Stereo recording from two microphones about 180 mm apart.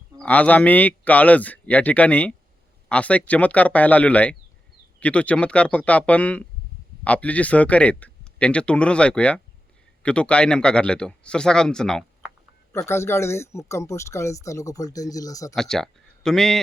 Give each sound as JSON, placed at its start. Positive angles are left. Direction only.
{"t": 0.2, "sound": "speech", "side_deg": 10}
{"t": 12.7, "sound": "speech", "side_deg": 15}
{"t": 15.5, "sound": "speech", "side_deg": 5}